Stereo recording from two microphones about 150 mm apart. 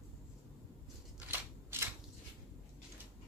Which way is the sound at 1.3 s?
15° right (ahead or behind).